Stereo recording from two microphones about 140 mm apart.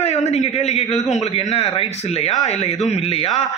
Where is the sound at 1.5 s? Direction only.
45° left (ahead or behind).